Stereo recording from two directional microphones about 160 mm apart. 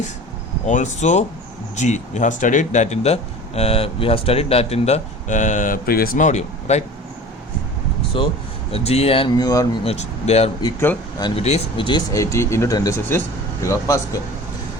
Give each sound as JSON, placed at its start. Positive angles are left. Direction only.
{"t": 0.6, "sound": "speech", "side_deg": 50}
{"t": 8.1, "sound": "speech", "side_deg": 35}